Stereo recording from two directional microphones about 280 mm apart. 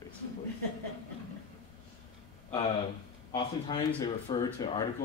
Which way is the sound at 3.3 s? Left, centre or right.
Centre.